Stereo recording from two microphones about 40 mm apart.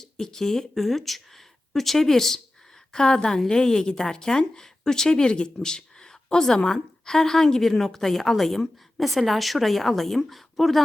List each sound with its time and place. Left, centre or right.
0.0 s a woman's voice: centre